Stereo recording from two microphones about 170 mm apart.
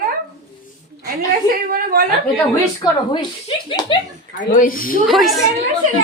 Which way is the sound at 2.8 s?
25° left (ahead or behind).